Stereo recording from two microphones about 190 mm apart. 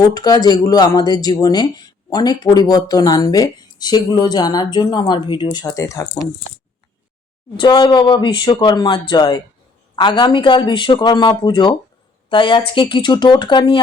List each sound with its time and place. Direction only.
0.0 s speech: 20° left (ahead or behind)
7.5 s speech: 25° left (ahead or behind)